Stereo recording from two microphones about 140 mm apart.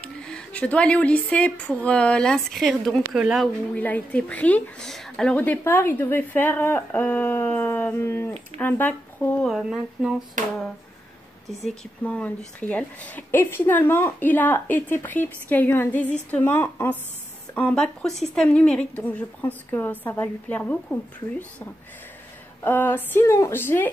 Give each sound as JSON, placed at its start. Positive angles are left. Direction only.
{"t": 0.0, "sound": "speech", "side_deg": 10}
{"t": 3.1, "sound": "a sound", "side_deg": -5}
{"t": 3.7, "sound": "a woman's voice", "side_deg": 10}
{"t": 9.5, "sound": "a sound", "side_deg": -5}
{"t": 11.6, "sound": "a woman's voice", "side_deg": 10}
{"t": 22.6, "sound": "a woman's voice", "side_deg": 15}